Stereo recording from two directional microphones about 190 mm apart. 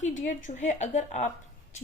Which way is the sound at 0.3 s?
40° left (ahead or behind).